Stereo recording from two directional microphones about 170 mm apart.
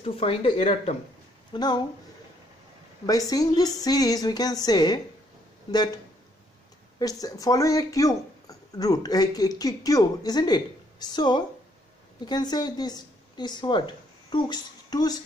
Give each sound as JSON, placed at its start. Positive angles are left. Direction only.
{"t": 0.0, "sound": "speech", "side_deg": 35}
{"t": 3.1, "sound": "speech", "side_deg": 20}
{"t": 7.0, "sound": "a woman's voice", "side_deg": 20}